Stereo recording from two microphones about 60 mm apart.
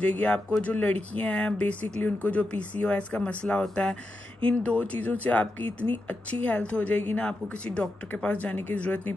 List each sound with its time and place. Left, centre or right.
0.0 s speech: left